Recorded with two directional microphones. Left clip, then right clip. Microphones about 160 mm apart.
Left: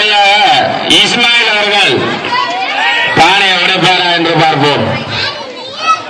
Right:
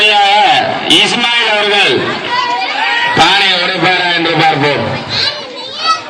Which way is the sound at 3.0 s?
40° left (ahead or behind).